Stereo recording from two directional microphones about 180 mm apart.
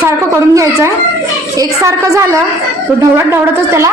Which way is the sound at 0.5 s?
15° right (ahead or behind).